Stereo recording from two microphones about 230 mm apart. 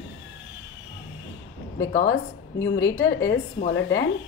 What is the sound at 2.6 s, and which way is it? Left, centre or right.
A woman's voice, left.